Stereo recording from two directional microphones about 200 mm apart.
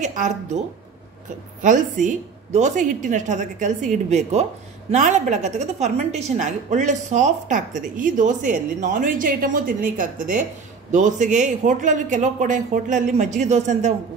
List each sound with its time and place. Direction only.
0.0 s speech: 40° right (ahead or behind)
1.6 s speech: 40° right (ahead or behind)